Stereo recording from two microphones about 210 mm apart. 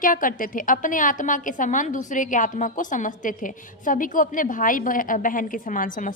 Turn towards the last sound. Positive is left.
turn(degrees=40)  # may be behind; listen again after turning